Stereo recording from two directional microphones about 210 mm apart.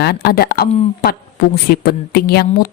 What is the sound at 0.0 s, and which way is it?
Speech, 50° left (ahead or behind).